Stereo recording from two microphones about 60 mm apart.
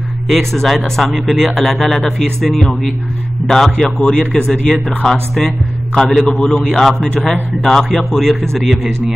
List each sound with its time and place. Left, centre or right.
0.3 s a man's voice: centre